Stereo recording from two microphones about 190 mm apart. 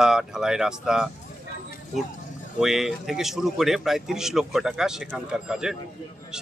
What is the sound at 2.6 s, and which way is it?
Speech, centre (ahead or behind).